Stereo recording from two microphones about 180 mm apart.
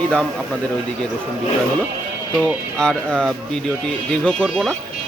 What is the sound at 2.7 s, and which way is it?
Speech, 5° left (ahead or behind).